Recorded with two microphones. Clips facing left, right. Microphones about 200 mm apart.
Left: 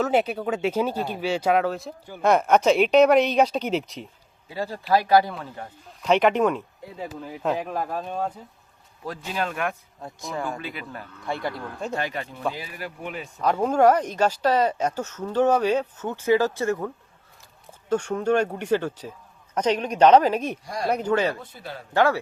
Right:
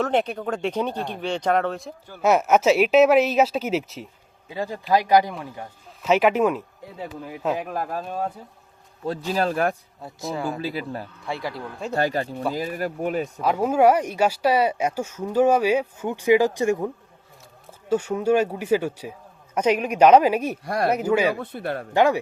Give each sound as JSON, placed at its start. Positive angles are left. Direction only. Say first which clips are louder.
{"t": 0.0, "sound": "speech", "louder": "left 1 dB", "side_deg": 5}
{"t": 4.4, "sound": "speech", "louder": "right 1 dB", "side_deg": -20}
{"t": 9.0, "sound": "speech", "louder": "right 5 dB", "side_deg": -35}
{"t": 10.3, "sound": "speech", "louder": "right 1 dB", "side_deg": 0}
{"t": 10.6, "sound": "speech", "louder": "right 7 dB", "side_deg": -35}
{"t": 11.3, "sound": "speech", "louder": "left 1 dB", "side_deg": 0}
{"t": 11.9, "sound": "speech", "louder": "right 12 dB", "side_deg": -40}
{"t": 13.4, "sound": "speech", "louder": "even", "side_deg": -5}
{"t": 20.7, "sound": "a man's voice", "louder": "right 7 dB", "side_deg": -65}
{"t": 20.9, "sound": "speech", "louder": "right 1 dB", "side_deg": -10}
{"t": 21.3, "sound": "a man's voice", "louder": "right 9 dB", "side_deg": -60}
{"t": 21.9, "sound": "speech", "louder": "right 2 dB", "side_deg": -15}